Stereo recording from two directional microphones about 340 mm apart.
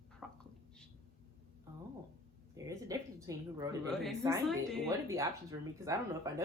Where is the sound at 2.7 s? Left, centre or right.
Centre.